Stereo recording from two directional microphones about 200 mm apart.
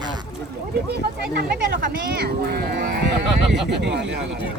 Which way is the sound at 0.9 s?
50° right (ahead or behind).